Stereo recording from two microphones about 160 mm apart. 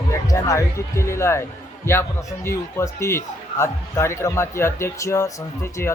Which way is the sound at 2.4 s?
15° left (ahead or behind).